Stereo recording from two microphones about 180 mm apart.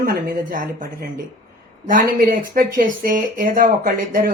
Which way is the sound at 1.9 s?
50° right (ahead or behind).